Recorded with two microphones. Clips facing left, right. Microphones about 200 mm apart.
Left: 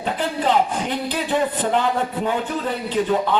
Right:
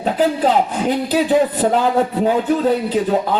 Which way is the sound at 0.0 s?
40° right (ahead or behind).